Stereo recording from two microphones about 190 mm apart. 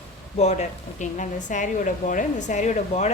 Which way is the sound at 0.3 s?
35° left (ahead or behind).